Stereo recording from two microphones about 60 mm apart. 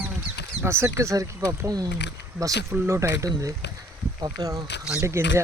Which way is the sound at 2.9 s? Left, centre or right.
Right.